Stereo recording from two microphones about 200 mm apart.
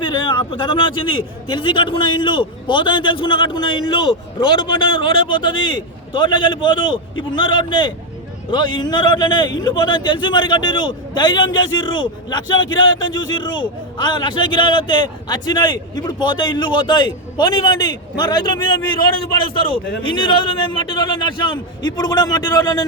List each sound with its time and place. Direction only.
0.0 s a man's voice: 20° left (ahead or behind)
20.0 s a man's voice: 25° left (ahead or behind)